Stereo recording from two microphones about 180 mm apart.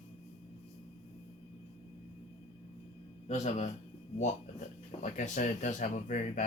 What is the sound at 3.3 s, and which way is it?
Speech, 40° left (ahead or behind).